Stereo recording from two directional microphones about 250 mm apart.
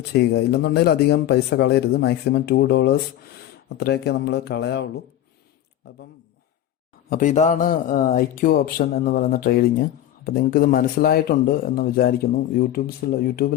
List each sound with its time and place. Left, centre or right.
0.1 s a man's voice: left
7.1 s a man's voice: left